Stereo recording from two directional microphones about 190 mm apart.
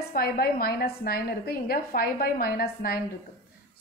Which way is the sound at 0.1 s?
50° left (ahead or behind).